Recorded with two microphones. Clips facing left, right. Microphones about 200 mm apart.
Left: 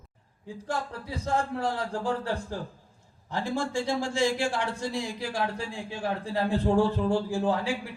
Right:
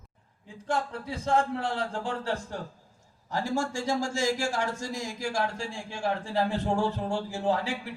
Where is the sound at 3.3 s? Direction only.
40° right (ahead or behind).